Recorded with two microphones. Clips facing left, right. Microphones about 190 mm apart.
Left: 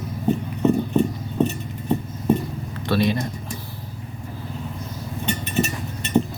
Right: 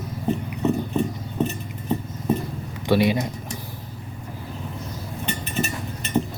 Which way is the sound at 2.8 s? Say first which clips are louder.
Right 2 dB; 15° right (ahead or behind).